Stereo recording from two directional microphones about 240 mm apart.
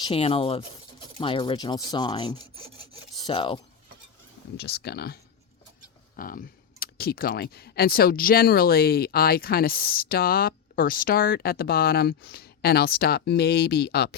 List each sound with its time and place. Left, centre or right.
0.0 s speech: left
4.5 s speech: left